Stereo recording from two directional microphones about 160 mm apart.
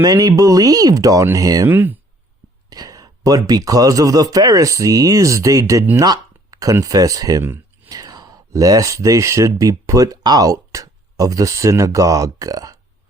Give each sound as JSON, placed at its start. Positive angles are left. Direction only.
{"t": 0.0, "sound": "a man's voice", "side_deg": -20}
{"t": 2.6, "sound": "a man's voice", "side_deg": -25}